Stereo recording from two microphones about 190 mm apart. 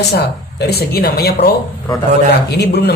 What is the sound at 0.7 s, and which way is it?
Speech, 55° left (ahead or behind).